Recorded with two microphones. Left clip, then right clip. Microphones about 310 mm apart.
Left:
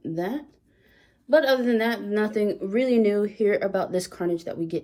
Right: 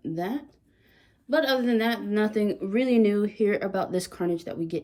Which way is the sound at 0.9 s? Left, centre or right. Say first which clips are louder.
Left 6 dB; centre.